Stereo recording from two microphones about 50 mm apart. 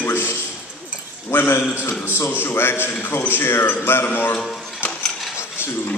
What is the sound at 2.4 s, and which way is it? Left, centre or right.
A man's voice, left.